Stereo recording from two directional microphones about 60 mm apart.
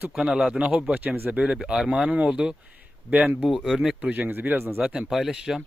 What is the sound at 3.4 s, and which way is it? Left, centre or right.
Speech, centre.